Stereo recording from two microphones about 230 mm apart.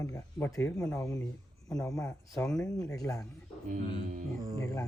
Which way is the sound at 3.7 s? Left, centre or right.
Right.